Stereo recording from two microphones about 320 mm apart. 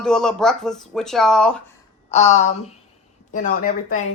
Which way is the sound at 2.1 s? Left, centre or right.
Left.